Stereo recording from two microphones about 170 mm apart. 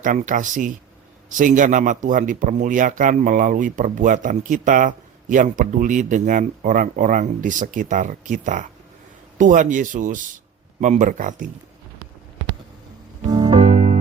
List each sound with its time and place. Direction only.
0.0 s speech: 50° right (ahead or behind)
13.2 s music: 25° right (ahead or behind)
13.5 s music: 45° right (ahead or behind)